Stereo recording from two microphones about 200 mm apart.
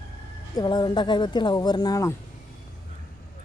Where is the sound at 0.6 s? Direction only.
20° left (ahead or behind).